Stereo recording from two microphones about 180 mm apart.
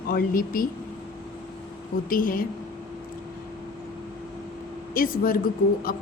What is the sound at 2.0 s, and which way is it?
Speech, 50° left (ahead or behind).